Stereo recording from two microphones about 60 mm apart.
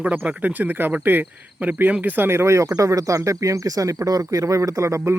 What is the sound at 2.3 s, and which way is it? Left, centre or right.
Speech, right.